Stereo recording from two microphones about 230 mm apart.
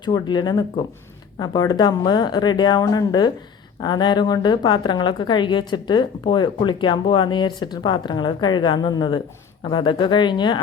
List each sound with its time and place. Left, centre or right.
0.0 s a woman's voice: centre